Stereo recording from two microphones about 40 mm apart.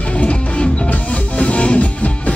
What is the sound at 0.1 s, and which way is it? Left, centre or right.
Music, left.